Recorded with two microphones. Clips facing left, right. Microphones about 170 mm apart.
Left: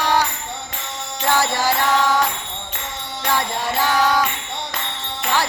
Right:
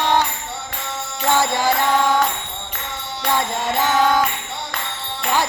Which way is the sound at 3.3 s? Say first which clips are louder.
Right 1 dB; 20° right (ahead or behind).